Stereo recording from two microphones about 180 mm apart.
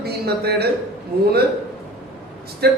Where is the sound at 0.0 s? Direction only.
60° right (ahead or behind).